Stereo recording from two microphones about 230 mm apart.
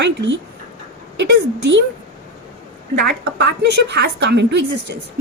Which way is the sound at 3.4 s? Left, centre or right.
Right.